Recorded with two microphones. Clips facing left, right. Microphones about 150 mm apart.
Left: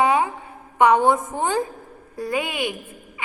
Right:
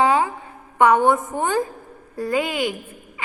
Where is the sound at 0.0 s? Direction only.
20° left (ahead or behind).